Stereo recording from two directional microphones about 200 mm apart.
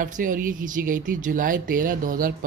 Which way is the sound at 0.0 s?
40° right (ahead or behind).